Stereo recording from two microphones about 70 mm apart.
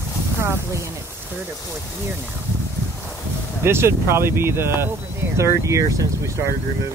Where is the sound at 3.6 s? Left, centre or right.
Right.